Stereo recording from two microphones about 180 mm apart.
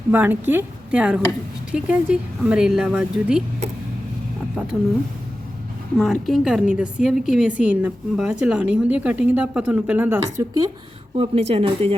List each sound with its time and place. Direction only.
0.1 s a woman's voice: 10° right (ahead or behind)
4.5 s speech: 5° right (ahead or behind)
6.0 s a woman's voice: centre (ahead or behind); by 10.7 s 20° right (ahead or behind)
11.2 s speech: 35° right (ahead or behind)